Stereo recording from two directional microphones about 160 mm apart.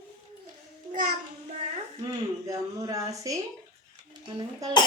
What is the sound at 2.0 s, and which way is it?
Speech, 20° right (ahead or behind).